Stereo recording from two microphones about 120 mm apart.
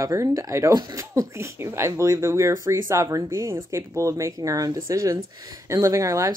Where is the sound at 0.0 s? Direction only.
25° right (ahead or behind).